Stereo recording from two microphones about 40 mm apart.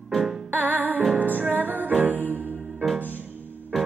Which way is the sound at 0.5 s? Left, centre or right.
Right.